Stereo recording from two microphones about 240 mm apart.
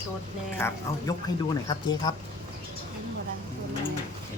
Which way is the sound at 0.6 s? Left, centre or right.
Centre.